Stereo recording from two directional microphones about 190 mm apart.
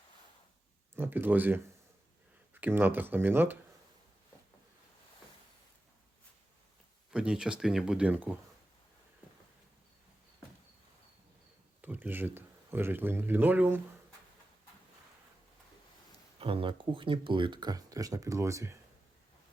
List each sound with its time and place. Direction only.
0.9 s speech: 10° right (ahead or behind)
7.1 s speech: 5° right (ahead or behind)
11.8 s speech: 10° right (ahead or behind)
16.4 s speech: 30° right (ahead or behind)